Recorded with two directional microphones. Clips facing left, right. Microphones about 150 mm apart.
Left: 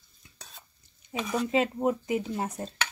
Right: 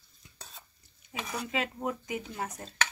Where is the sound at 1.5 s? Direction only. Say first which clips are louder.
Left 7 dB; 25° left (ahead or behind).